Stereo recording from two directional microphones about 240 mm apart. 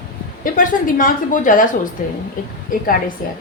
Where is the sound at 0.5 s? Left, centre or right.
Left.